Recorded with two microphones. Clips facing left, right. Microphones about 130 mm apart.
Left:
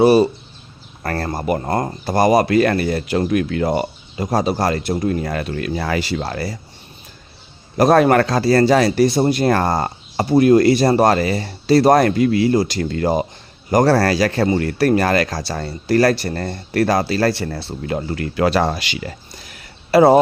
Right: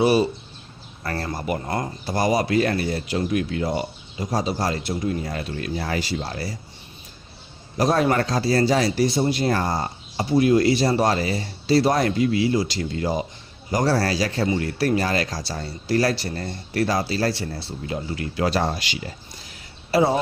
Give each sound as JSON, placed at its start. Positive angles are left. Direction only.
{"t": 0.0, "sound": "speech", "side_deg": 40}
{"t": 7.8, "sound": "speech", "side_deg": 60}
{"t": 14.4, "sound": "speech", "side_deg": 50}